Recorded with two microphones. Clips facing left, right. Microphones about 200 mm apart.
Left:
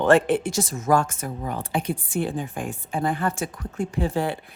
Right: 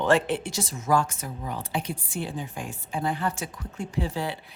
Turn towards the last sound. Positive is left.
turn(degrees=50)  # may be behind; listen again after turning